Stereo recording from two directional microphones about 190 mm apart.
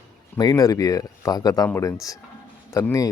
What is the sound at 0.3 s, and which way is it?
Speech, 20° left (ahead or behind).